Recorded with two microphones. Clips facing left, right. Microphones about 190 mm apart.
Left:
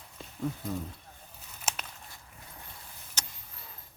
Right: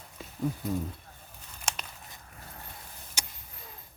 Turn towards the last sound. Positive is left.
turn(degrees=-10)  # may be behind; listen again after turning